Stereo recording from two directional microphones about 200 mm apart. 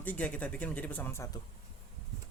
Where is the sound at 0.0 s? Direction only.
10° left (ahead or behind).